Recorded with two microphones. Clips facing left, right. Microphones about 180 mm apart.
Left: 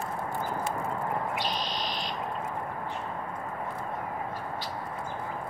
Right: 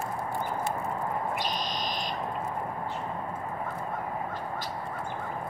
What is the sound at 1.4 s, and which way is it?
Fire alarm, 45° right (ahead or behind).